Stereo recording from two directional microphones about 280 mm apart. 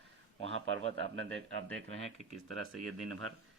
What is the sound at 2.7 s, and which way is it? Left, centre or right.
Speech, right.